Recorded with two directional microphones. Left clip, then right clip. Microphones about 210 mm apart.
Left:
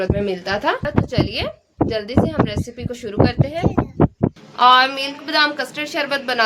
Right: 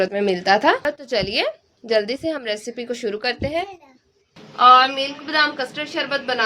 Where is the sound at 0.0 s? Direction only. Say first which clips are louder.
Right 2 dB; 30° right (ahead or behind).